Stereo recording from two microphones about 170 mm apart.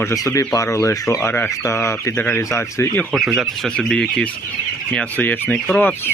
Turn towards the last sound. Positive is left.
turn(degrees=10)  # may be behind; listen again after turning